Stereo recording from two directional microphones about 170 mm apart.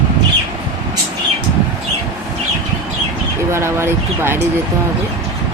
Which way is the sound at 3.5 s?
15° right (ahead or behind).